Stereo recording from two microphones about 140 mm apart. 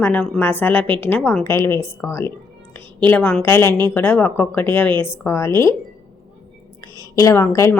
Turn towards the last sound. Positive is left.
turn(degrees=15)  # may be behind; listen again after turning